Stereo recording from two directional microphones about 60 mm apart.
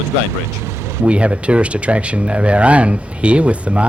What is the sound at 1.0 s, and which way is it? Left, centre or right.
Speech, centre.